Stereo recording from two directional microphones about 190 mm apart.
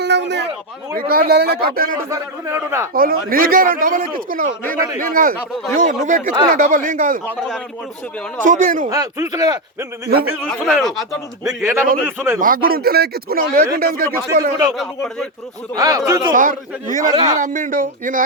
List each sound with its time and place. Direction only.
0.0 s a sound: 65° right (ahead or behind)
0.9 s a man's voice: 50° right (ahead or behind)
2.0 s a man's voice: 10° right (ahead or behind)
2.9 s a man's voice: 50° right (ahead or behind)
8.4 s a man's voice: 45° right (ahead or behind)
8.9 s speech: 15° right (ahead or behind)
10.1 s a man's voice: 55° right (ahead or behind)
10.4 s speech: centre (ahead or behind)
11.4 s a man's voice: 15° right (ahead or behind)
12.4 s a man's voice: 50° right (ahead or behind)
14.8 s speech: centre (ahead or behind)
15.7 s speech: 20° right (ahead or behind)
16.3 s a man's voice: 45° right (ahead or behind)